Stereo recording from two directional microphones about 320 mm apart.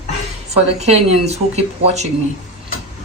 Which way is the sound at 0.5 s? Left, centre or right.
Centre.